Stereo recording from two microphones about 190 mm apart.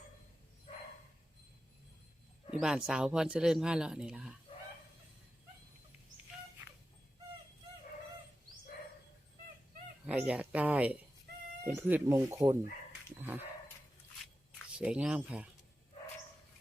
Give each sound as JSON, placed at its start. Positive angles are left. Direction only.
{"t": 0.7, "sound": "dog", "side_deg": 30}
{"t": 2.5, "sound": "speech", "side_deg": -5}
{"t": 10.1, "sound": "speech", "side_deg": -5}
{"t": 14.8, "sound": "speech", "side_deg": -5}